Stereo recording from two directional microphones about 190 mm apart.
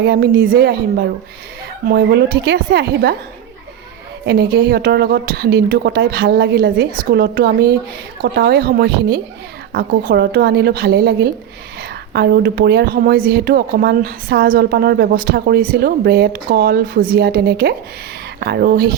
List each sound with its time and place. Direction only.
0.0 s a woman's voice: 60° right (ahead or behind)
4.3 s a woman's voice: 60° right (ahead or behind)